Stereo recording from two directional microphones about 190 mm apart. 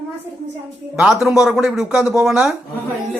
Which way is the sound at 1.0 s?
5° right (ahead or behind).